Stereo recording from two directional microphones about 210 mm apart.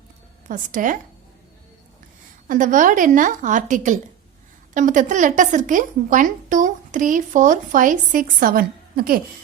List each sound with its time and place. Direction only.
0.4 s a woman's voice: 40° right (ahead or behind)
2.5 s a woman's voice: 40° right (ahead or behind)